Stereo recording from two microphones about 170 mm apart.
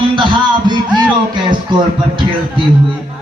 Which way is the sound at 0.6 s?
25° right (ahead or behind).